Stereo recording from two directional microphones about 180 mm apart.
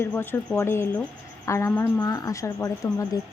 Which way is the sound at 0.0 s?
10° left (ahead or behind).